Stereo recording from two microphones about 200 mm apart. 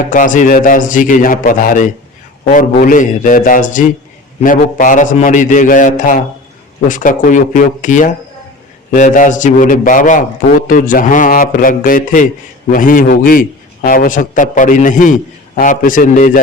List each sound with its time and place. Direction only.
0.0 s a man's voice: 40° left (ahead or behind)